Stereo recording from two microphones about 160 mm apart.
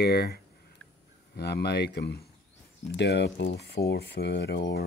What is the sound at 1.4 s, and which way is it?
Speech, 90° left.